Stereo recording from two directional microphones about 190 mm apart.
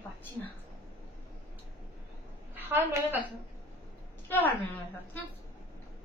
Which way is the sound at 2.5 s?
10° right (ahead or behind).